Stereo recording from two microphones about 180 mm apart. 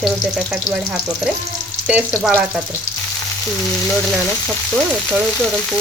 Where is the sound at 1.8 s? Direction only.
10° right (ahead or behind).